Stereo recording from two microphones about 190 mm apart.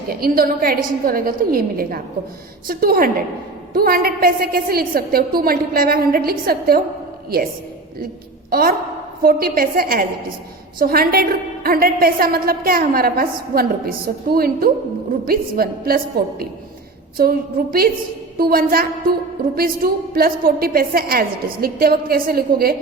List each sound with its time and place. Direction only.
0.2 s a woman's voice: 50° right (ahead or behind)
8.4 s a woman's voice: 50° right (ahead or behind)